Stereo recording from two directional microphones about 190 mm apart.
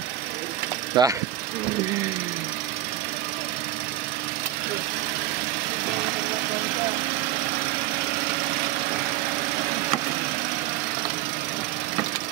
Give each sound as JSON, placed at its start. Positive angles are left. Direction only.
{"t": 1.0, "sound": "speech", "side_deg": -20}